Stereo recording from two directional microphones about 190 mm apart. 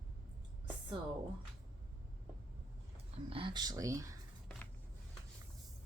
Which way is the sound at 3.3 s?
25° right (ahead or behind).